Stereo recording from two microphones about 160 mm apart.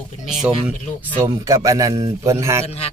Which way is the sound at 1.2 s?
20° right (ahead or behind).